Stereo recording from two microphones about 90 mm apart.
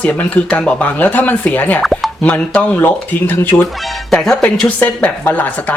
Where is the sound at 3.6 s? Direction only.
Centre (ahead or behind).